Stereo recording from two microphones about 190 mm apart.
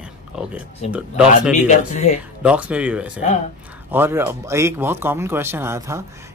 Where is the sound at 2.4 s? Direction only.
5° right (ahead or behind).